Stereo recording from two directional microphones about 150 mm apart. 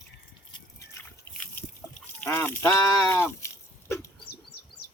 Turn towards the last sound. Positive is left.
turn(degrees=90)